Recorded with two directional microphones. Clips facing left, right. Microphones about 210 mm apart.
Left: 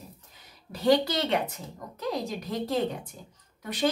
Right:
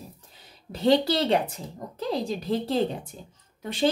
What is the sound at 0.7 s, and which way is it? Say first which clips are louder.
Speech: right 2 dB; 25° right (ahead or behind).